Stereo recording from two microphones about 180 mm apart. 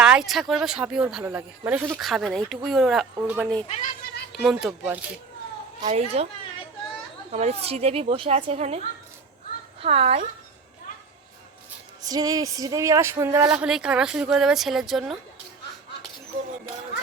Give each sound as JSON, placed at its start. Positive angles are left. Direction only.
{"t": 0.0, "sound": "speech", "side_deg": -5}
{"t": 1.9, "sound": "speech", "side_deg": 0}
{"t": 5.9, "sound": "a woman's voice", "side_deg": -35}
{"t": 7.3, "sound": "a woman's voice", "side_deg": -35}
{"t": 9.8, "sound": "a woman's voice", "side_deg": -35}
{"t": 12.0, "sound": "speech", "side_deg": -20}
{"t": 13.6, "sound": "speech", "side_deg": -5}